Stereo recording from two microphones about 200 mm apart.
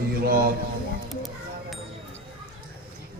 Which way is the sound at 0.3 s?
45° right (ahead or behind).